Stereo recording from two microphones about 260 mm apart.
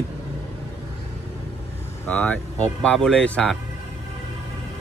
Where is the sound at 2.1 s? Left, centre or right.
Centre.